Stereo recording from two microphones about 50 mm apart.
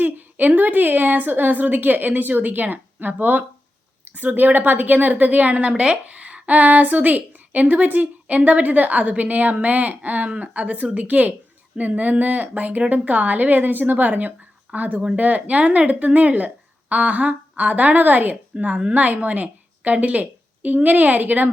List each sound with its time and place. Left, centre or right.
0.0 s a woman's voice: right
18.5 s a woman's voice: right